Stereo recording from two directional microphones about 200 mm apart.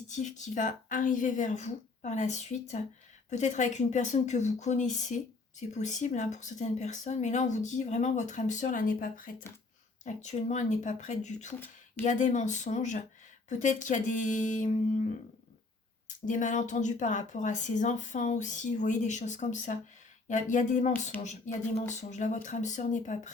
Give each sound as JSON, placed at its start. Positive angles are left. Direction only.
{"t": 0.1, "sound": "a woman's voice", "side_deg": 35}
{"t": 16.2, "sound": "a woman's voice", "side_deg": 40}